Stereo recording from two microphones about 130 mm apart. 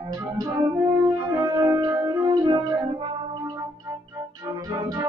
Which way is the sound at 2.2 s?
35° right (ahead or behind).